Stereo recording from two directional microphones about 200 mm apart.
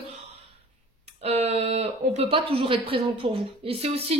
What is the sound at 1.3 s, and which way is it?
A woman's voice, 30° right (ahead or behind).